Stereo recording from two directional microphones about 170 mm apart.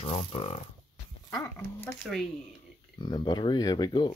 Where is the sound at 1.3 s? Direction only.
15° left (ahead or behind).